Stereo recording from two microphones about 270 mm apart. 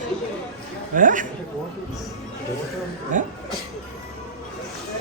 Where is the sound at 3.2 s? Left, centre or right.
Right.